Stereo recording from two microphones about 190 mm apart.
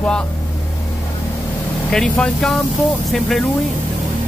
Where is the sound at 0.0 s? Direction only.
5° left (ahead or behind).